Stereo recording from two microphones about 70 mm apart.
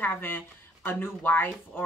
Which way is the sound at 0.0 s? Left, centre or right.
Left.